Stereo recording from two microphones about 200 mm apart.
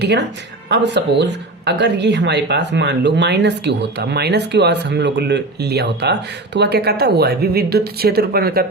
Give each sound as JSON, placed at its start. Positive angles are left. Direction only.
{"t": 0.0, "sound": "speech", "side_deg": -60}